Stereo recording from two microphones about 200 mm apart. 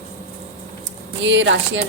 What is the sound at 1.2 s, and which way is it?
Speech, 70° right (ahead or behind).